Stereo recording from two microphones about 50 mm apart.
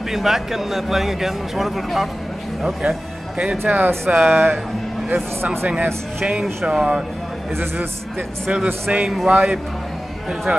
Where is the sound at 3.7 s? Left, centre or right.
Right.